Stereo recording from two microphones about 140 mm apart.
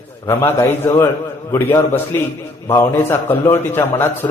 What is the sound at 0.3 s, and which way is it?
A man's voice, 15° left (ahead or behind).